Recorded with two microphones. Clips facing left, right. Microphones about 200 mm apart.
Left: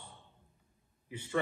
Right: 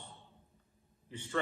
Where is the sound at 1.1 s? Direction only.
10° left (ahead or behind).